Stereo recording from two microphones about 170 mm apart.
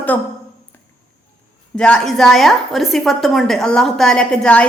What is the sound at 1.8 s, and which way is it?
A woman's voice, 5° left (ahead or behind).